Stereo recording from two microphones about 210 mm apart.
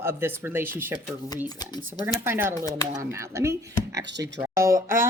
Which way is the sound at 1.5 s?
20° left (ahead or behind).